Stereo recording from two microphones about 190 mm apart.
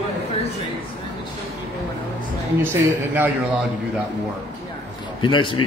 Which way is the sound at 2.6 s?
10° right (ahead or behind).